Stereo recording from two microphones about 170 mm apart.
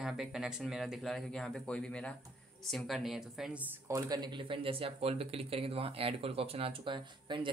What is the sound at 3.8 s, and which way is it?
Speech, 20° right (ahead or behind).